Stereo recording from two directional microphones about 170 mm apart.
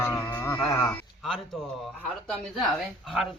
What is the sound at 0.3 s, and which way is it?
Speech, 10° left (ahead or behind).